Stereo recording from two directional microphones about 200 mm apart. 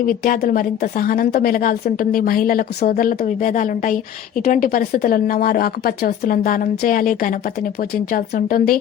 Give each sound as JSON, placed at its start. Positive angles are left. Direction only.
{"t": 0.0, "sound": "a woman's voice", "side_deg": 45}